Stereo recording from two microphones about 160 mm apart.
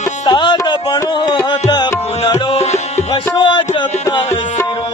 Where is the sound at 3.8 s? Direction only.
30° left (ahead or behind).